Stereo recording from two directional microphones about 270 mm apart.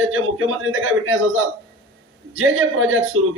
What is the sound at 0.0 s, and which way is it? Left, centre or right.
A man's voice, right.